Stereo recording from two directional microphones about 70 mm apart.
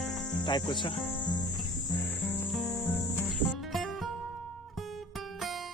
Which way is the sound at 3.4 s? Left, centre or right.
Centre.